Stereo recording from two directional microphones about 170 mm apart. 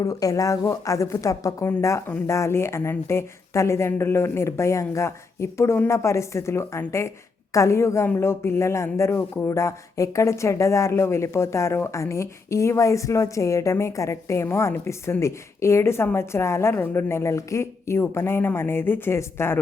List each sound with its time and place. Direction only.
0.0 s a woman's voice: 20° left (ahead or behind)